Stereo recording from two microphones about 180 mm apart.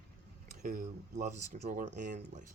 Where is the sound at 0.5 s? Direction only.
50° right (ahead or behind).